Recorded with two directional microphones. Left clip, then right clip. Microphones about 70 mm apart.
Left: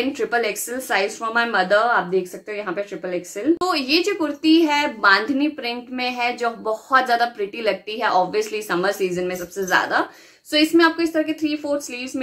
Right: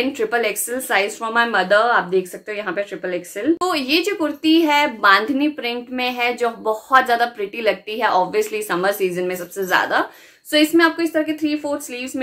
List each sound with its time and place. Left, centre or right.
0.2 s a woman's voice: right